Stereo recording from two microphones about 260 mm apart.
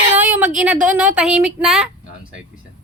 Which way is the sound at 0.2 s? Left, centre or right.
Centre.